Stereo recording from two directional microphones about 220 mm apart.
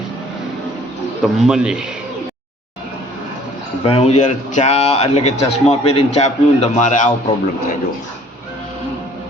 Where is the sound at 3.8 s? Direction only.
25° left (ahead or behind).